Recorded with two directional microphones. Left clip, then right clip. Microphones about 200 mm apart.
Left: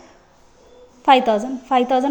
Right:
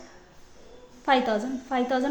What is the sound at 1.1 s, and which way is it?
A woman's voice, 25° left (ahead or behind).